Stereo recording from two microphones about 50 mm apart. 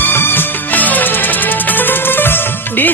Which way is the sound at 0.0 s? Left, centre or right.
Left.